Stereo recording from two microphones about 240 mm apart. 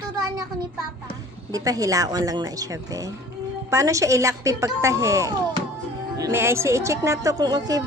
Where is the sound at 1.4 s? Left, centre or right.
Centre.